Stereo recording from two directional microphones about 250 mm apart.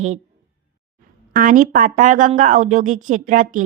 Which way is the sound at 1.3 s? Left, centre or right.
Right.